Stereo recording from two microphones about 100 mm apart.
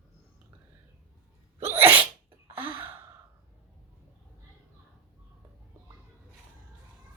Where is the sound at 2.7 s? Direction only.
20° right (ahead or behind).